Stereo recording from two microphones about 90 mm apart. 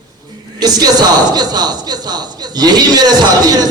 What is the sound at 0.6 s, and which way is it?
A man's voice, 50° right (ahead or behind).